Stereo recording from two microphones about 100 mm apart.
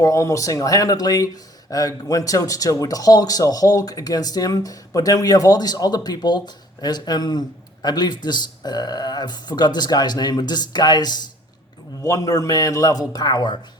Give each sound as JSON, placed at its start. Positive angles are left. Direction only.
{"t": 0.0, "sound": "a man's voice", "side_deg": 30}
{"t": 12.0, "sound": "a man's voice", "side_deg": 35}